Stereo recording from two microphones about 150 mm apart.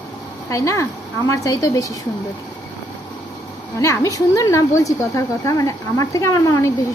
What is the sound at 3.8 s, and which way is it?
A woman's voice, 20° left (ahead or behind).